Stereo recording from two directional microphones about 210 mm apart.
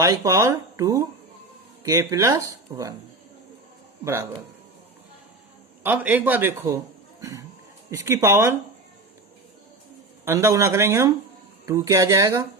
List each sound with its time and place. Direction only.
0.0 s speech: 15° right (ahead or behind)
4.0 s speech: 15° right (ahead or behind)
5.8 s speech: 10° right (ahead or behind)
10.2 s speech: 15° right (ahead or behind)